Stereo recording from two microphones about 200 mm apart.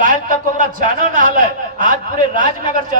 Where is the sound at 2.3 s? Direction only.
40° right (ahead or behind).